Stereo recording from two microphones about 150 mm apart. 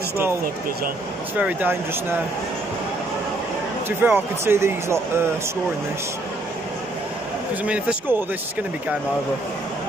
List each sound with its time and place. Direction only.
1.4 s speech: 15° right (ahead or behind)
4.0 s speech: 15° right (ahead or behind)
7.6 s speech: 10° right (ahead or behind)